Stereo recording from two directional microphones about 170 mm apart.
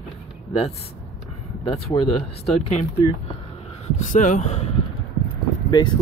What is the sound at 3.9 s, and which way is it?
Speech, 50° left (ahead or behind).